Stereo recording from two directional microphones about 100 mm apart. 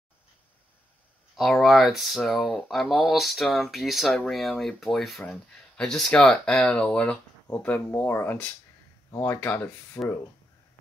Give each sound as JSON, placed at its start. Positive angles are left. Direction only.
{"t": 1.6, "sound": "speech", "side_deg": 0}